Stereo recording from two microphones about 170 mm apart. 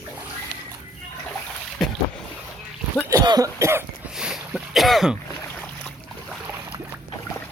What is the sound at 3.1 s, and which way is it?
Cough, 20° right (ahead or behind).